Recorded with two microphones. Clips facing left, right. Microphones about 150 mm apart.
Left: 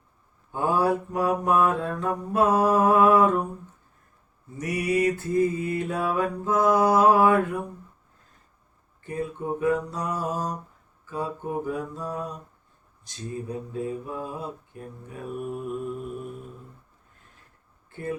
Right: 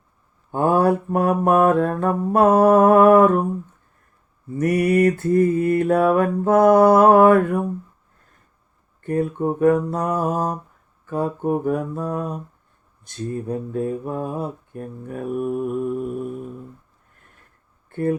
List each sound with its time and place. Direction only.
0.5 s mantra: 55° right (ahead or behind)
4.5 s mantra: 55° right (ahead or behind)
9.0 s mantra: 60° right (ahead or behind)
17.8 s speech: 55° right (ahead or behind)